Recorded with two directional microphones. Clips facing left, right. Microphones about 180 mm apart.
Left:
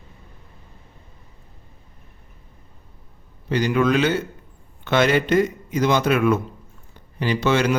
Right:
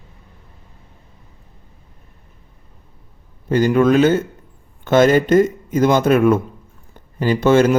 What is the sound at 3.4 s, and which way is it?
Speech, 50° right (ahead or behind).